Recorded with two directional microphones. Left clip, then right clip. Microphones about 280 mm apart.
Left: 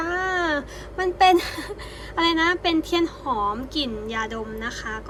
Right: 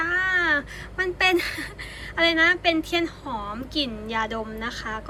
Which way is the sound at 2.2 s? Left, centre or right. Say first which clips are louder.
Right 2 dB; centre.